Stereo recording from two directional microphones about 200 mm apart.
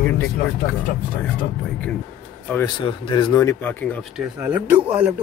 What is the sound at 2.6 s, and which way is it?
Speech, 25° left (ahead or behind).